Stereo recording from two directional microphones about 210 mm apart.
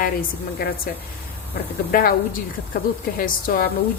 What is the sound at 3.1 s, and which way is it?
Speech, 40° left (ahead or behind).